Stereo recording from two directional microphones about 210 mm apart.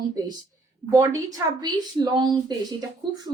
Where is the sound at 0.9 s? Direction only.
20° right (ahead or behind).